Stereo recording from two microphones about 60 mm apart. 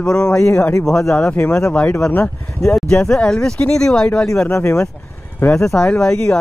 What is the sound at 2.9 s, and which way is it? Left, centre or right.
Speech, centre.